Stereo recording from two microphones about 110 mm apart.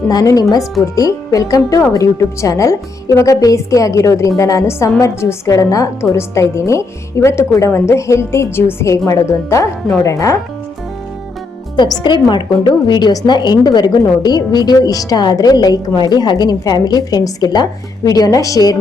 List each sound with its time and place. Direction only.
0.1 s a woman's voice: 35° left (ahead or behind)
11.8 s a woman's voice: 45° left (ahead or behind)